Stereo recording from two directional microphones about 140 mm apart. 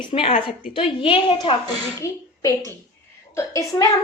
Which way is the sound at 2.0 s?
20° left (ahead or behind).